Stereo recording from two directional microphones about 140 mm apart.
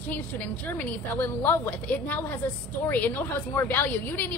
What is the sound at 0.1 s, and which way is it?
A woman's voice, 10° left (ahead or behind).